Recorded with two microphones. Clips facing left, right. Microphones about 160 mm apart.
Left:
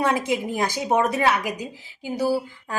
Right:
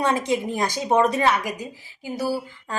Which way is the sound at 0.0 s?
5° left (ahead or behind).